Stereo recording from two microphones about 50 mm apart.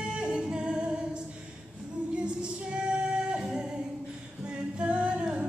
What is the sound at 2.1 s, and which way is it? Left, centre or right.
Female singing, centre.